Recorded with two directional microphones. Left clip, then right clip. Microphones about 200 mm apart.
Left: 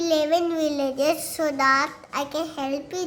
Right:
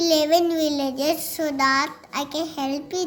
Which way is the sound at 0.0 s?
Centre (ahead or behind).